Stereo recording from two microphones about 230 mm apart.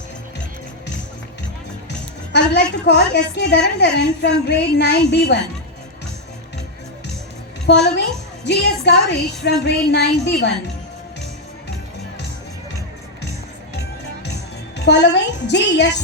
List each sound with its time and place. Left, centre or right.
2.3 s a woman's voice: left
7.7 s a woman's voice: left
14.8 s a woman's voice: left